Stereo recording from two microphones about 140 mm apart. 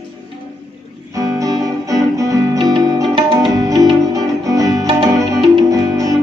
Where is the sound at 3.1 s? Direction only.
40° right (ahead or behind).